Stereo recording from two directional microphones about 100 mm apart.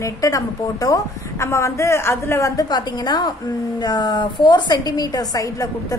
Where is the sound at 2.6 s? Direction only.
45° left (ahead or behind).